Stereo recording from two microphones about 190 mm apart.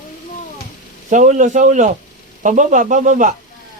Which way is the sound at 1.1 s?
40° right (ahead or behind).